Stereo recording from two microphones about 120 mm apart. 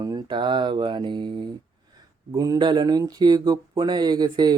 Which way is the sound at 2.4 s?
35° right (ahead or behind).